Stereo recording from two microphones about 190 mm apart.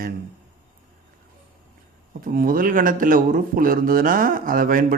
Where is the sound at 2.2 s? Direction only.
50° right (ahead or behind).